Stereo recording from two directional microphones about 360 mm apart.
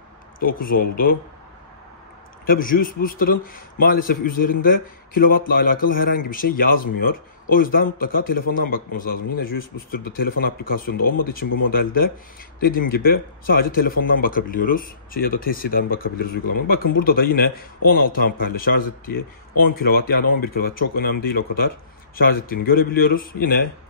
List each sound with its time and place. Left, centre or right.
0.4 s speech: left
2.4 s speech: left